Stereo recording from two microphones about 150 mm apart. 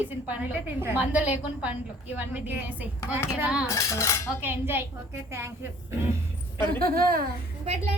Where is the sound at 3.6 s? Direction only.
20° left (ahead or behind).